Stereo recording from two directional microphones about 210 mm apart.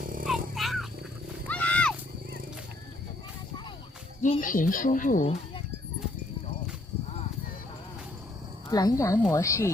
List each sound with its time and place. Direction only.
0.0 s dog: 40° right (ahead or behind)
0.5 s wild animals: centre (ahead or behind)
4.2 s speech: 40° left (ahead or behind)
8.7 s speech: 15° left (ahead or behind)